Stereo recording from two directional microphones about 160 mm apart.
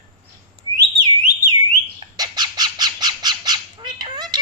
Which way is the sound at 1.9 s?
25° right (ahead or behind).